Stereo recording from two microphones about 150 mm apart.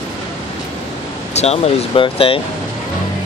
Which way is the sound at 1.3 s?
45° left (ahead or behind).